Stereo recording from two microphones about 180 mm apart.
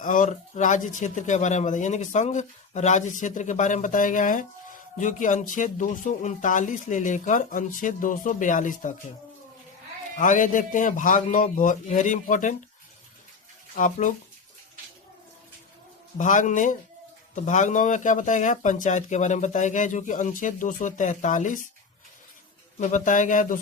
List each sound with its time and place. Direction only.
0.0 s speech: 45° left (ahead or behind)
10.2 s speech: 45° left (ahead or behind)
13.7 s speech: 45° left (ahead or behind)
16.1 s speech: 45° left (ahead or behind)
22.8 s speech: 45° left (ahead or behind)